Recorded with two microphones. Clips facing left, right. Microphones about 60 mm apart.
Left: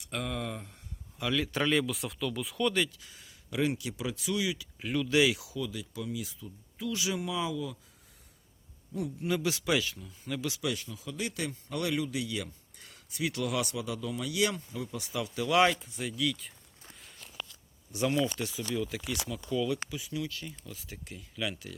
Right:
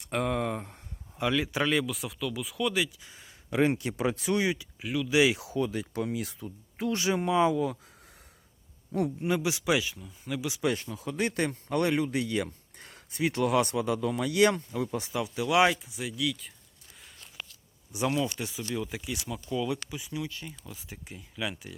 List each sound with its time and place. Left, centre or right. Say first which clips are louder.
0.0 s speech: right 6 dB; right
1.3 s speech: right 1 dB; centre
3.0 s speech: right 2 dB; right
4.8 s speech: left 2 dB; centre
5.0 s speech: right 2 dB; centre
5.3 s speech: right 5 dB; right
8.9 s speech: right 6 dB; right
9.2 s speech: left 1 dB; right
10.6 s speech: right 5 dB; right
15.0 s speech: right 2 dB; right; by 16.5 s centre
17.9 s speech: even; centre